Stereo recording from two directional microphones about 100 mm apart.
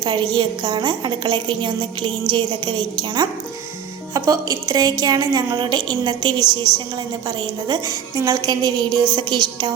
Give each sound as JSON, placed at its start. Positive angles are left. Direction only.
{"t": 0.0, "sound": "a woman's voice", "side_deg": -50}
{"t": 4.1, "sound": "a woman's voice", "side_deg": -35}